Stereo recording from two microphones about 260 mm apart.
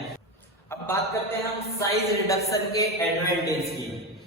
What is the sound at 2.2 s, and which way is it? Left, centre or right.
Speech, centre.